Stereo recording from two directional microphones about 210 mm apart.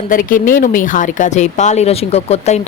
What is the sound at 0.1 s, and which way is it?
Speech, 40° left (ahead or behind).